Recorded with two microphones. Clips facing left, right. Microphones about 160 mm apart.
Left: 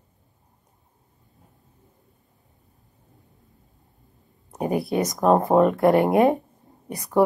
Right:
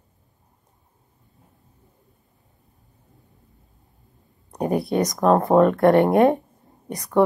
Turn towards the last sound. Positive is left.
turn(degrees=5)  # may be behind; listen again after turning